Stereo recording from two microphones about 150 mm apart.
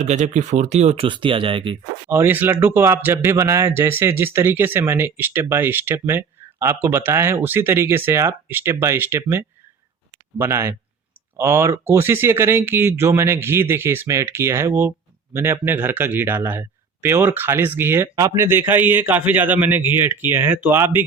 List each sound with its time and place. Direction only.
0.0 s speech: 55° right (ahead or behind)
1.0 s speech: 35° right (ahead or behind)
2.0 s speech: 15° right (ahead or behind)